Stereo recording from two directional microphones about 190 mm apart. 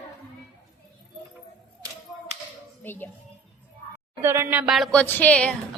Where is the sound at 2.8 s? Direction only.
10° left (ahead or behind).